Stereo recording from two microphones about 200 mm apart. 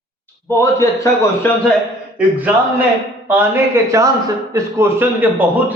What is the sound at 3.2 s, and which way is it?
A man's voice, 10° right (ahead or behind).